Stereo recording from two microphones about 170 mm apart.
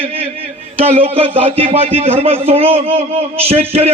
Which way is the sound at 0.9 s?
35° right (ahead or behind).